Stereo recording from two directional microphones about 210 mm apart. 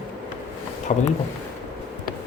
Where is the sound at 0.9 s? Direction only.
35° left (ahead or behind).